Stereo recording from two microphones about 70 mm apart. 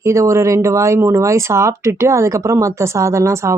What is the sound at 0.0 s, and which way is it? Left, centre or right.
Speech, right.